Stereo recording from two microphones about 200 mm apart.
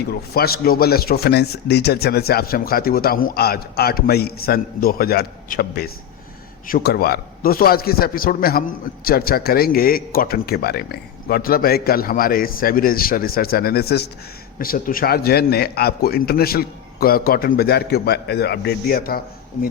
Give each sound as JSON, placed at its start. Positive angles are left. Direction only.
{"t": 0.0, "sound": "speech", "side_deg": 50}